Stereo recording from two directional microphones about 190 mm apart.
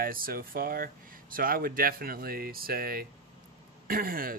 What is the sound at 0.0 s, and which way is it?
Speech, 50° right (ahead or behind).